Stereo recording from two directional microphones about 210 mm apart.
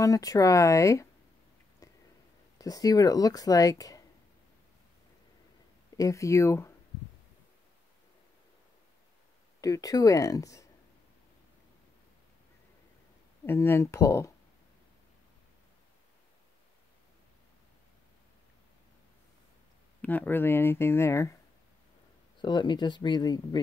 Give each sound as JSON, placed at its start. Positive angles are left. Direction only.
{"t": 0.0, "sound": "speech", "side_deg": 15}
{"t": 1.8, "sound": "a sound", "side_deg": 15}
{"t": 2.6, "sound": "speech", "side_deg": 20}
{"t": 5.9, "sound": "speech", "side_deg": 15}
{"t": 9.6, "sound": "speech", "side_deg": 15}
{"t": 13.5, "sound": "speech", "side_deg": 15}
{"t": 20.0, "sound": "speech", "side_deg": 10}
{"t": 22.4, "sound": "speech", "side_deg": 20}